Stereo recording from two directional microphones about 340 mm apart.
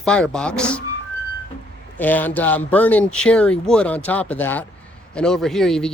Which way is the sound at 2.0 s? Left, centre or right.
Centre.